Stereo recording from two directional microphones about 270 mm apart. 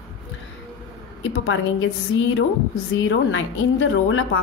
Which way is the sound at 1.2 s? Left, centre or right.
Left.